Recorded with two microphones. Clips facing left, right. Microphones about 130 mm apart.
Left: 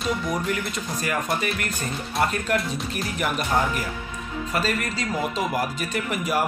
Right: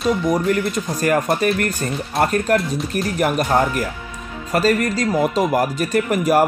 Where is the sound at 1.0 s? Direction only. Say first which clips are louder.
Right 9 dB; 45° right (ahead or behind).